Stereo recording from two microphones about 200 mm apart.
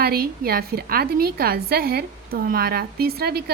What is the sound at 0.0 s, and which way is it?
A woman's voice, 50° right (ahead or behind).